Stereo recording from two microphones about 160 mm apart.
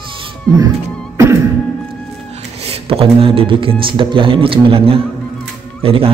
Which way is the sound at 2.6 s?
35° right (ahead or behind).